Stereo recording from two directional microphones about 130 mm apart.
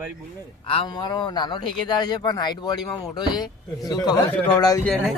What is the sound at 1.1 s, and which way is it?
Speech, 35° left (ahead or behind).